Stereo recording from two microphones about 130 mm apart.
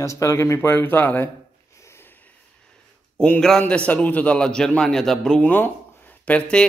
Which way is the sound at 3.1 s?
10° left (ahead or behind).